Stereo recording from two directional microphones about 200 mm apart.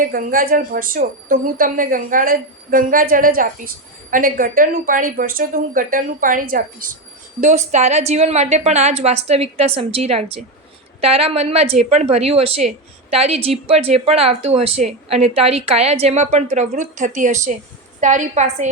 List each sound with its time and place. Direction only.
0.0 s a woman's voice: 45° right (ahead or behind)
7.4 s a woman's voice: 35° right (ahead or behind)